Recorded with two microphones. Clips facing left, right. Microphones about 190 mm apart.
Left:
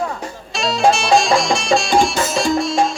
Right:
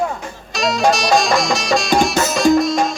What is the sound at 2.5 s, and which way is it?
Music, 30° left (ahead or behind).